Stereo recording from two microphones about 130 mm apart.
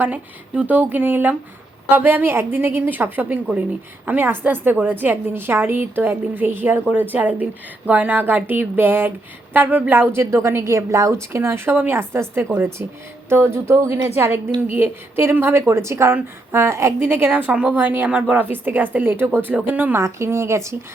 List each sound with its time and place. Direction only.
0.0 s a woman's voice: 10° right (ahead or behind)